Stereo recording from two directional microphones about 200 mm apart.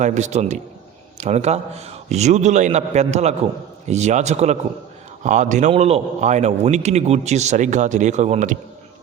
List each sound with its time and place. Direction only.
0.0 s a man's voice: 35° right (ahead or behind)